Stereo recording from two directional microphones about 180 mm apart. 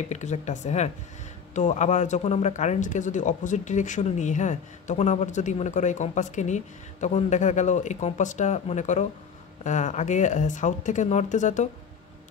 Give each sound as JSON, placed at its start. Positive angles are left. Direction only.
{"t": 0.1, "sound": "speech", "side_deg": 40}